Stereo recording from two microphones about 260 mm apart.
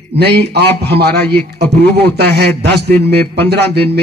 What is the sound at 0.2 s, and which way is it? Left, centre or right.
A man's voice, right.